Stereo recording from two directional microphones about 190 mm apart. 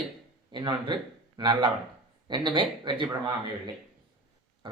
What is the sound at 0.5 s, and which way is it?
Speech, 25° right (ahead or behind).